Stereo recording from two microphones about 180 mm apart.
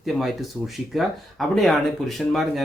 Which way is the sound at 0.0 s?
Centre (ahead or behind).